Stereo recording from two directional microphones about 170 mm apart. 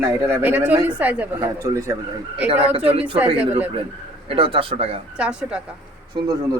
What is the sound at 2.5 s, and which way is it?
Speech, 35° right (ahead or behind).